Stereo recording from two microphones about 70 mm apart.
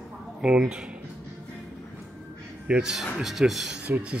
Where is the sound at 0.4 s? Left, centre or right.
Centre.